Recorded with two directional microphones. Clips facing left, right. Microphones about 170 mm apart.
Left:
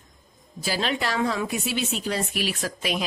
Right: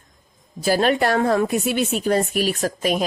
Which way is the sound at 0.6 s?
50° right (ahead or behind).